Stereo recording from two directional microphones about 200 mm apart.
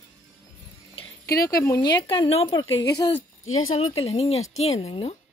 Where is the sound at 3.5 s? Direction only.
90° left.